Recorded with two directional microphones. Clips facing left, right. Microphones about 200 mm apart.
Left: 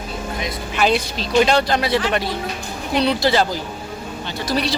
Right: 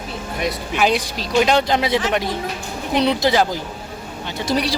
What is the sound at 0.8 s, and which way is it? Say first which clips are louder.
A man's voice: left 1 dB; 15° right (ahead or behind).